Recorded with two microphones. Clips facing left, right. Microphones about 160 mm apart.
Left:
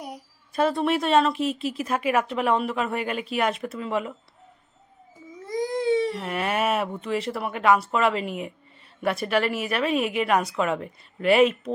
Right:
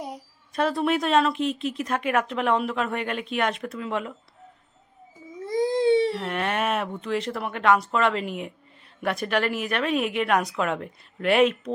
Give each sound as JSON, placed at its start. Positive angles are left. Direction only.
{"t": 0.5, "sound": "speech", "side_deg": 0}
{"t": 5.5, "sound": "baby cry", "side_deg": -25}
{"t": 6.1, "sound": "speech", "side_deg": 0}